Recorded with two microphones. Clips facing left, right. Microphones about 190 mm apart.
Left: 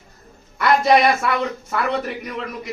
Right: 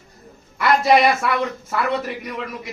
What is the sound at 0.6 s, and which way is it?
A man's voice, 5° right (ahead or behind).